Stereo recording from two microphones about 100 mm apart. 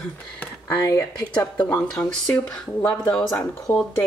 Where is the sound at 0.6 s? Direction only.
30° left (ahead or behind).